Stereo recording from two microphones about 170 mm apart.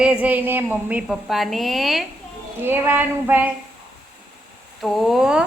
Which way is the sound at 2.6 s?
15° right (ahead or behind).